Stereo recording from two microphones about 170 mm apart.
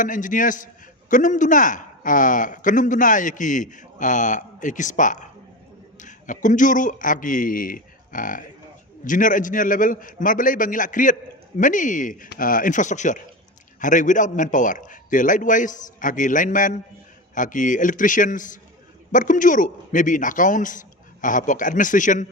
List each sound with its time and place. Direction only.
0.0 s a man's voice: 50° left (ahead or behind)